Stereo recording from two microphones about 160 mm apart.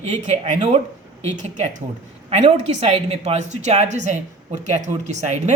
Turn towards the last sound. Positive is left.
turn(degrees=-45)  # may be behind; listen again after turning